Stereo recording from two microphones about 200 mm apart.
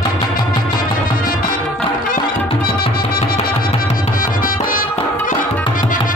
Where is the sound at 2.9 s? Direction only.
45° left (ahead or behind).